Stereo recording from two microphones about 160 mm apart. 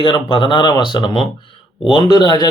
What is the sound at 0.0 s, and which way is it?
Speech, 30° left (ahead or behind).